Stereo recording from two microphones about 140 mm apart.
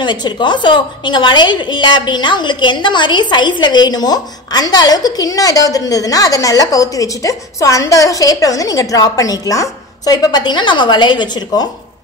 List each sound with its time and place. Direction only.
0.0 s a woman's voice: 30° left (ahead or behind)